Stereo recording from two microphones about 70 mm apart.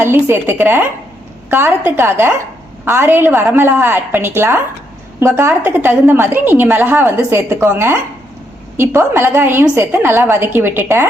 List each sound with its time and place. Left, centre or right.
0.0 s a woman's voice: right